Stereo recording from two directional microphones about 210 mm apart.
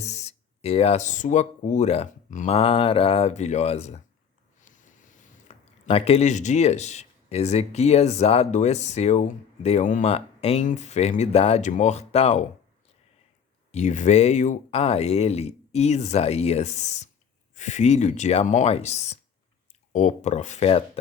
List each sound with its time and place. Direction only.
0.0 s speech: 30° left (ahead or behind)
4.6 s a sound: 35° left (ahead or behind)
5.9 s speech: 30° left (ahead or behind)
13.7 s speech: 35° left (ahead or behind)